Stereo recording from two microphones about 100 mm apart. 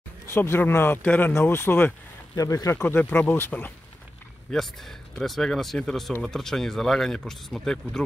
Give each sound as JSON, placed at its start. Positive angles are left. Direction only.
{"t": 0.3, "sound": "speech", "side_deg": 20}
{"t": 2.3, "sound": "speech", "side_deg": 35}
{"t": 2.7, "sound": "speech", "side_deg": 20}
{"t": 4.5, "sound": "speech", "side_deg": 0}